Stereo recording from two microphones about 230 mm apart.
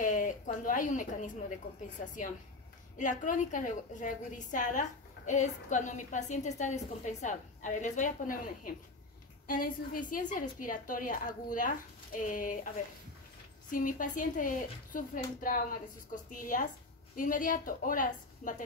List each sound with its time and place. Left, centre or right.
0.0 s a woman's voice: left
3.0 s a woman's voice: left